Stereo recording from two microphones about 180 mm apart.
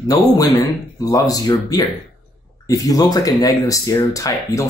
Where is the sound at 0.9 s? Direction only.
20° left (ahead or behind).